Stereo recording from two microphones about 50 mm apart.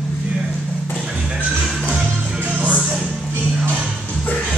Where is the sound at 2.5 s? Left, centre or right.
Right.